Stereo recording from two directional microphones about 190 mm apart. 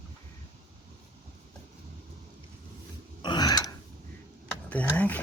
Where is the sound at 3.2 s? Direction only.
20° left (ahead or behind).